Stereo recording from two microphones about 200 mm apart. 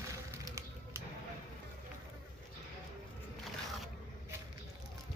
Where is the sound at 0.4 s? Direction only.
15° right (ahead or behind).